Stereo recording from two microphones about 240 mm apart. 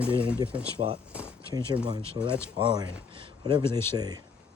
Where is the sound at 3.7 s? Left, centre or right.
Centre.